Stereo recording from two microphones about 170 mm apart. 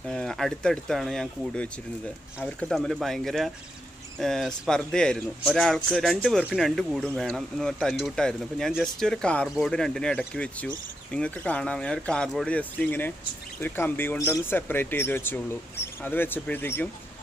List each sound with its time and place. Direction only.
0.1 s speech: centre (ahead or behind)